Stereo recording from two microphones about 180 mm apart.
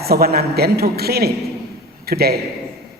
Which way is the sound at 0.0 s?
60° right (ahead or behind).